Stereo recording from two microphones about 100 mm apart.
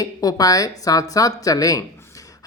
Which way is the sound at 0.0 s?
40° left (ahead or behind).